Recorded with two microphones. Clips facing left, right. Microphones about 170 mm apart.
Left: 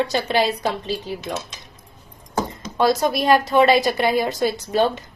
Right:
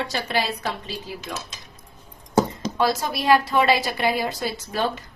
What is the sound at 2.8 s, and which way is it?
A woman's voice, 20° left (ahead or behind).